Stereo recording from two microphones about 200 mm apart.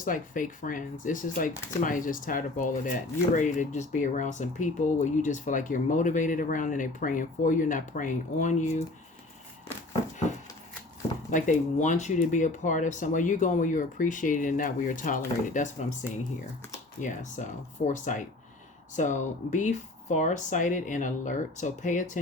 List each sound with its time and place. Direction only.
0.0 s speech: 40° left (ahead or behind)
11.3 s speech: 40° left (ahead or behind)